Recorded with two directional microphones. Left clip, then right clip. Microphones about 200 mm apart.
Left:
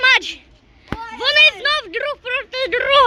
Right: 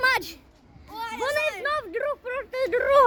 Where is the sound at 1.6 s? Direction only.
5° left (ahead or behind).